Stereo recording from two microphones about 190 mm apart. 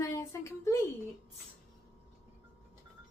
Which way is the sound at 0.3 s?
15° left (ahead or behind).